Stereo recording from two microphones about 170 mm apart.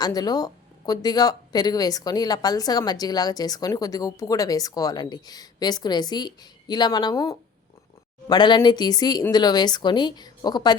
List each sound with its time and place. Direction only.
0.0 s speech: 25° left (ahead or behind)